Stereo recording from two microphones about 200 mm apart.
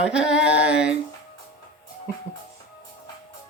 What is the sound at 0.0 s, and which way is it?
Humming, 5° right (ahead or behind).